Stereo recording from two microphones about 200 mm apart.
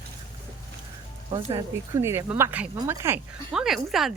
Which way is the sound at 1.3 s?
25° right (ahead or behind).